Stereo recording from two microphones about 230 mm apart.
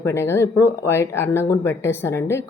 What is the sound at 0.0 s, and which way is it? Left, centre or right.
Speech, centre.